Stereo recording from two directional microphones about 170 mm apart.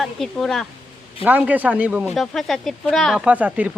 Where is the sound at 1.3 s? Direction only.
10° right (ahead or behind).